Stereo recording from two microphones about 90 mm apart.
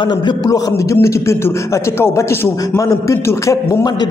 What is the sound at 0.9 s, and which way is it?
Speech, 35° left (ahead or behind).